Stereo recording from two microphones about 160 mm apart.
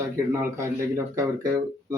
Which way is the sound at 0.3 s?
15° right (ahead or behind).